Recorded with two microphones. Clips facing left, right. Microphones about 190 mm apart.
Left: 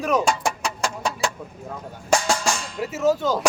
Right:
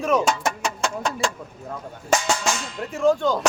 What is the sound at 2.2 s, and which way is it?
Music, centre (ahead or behind).